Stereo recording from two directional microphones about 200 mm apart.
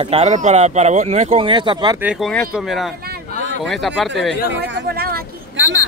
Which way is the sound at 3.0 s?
50° right (ahead or behind).